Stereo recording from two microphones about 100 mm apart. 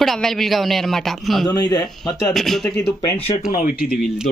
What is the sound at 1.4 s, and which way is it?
Speech, 40° left (ahead or behind).